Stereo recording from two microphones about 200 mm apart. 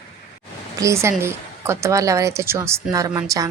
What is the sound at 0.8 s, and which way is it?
A woman's voice, 15° right (ahead or behind).